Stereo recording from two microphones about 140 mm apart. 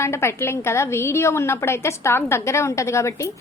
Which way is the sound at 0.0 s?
20° left (ahead or behind).